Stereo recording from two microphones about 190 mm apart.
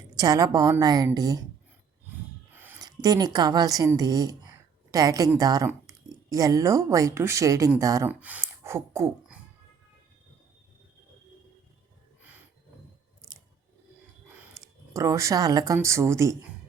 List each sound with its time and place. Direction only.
0.2 s a woman's voice: 20° right (ahead or behind)
2.5 s a woman's voice: 10° right (ahead or behind)
8.2 s a sound: 10° right (ahead or behind)
14.3 s speech: 15° right (ahead or behind)